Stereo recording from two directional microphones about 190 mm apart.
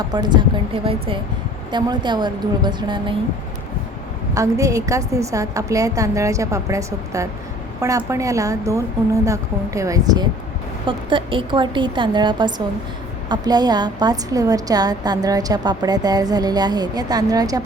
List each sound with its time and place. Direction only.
0.1 s a woman's voice: 20° right (ahead or behind)
4.4 s a woman's voice: 15° right (ahead or behind)